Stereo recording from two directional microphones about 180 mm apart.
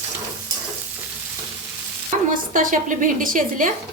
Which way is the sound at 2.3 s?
50° right (ahead or behind).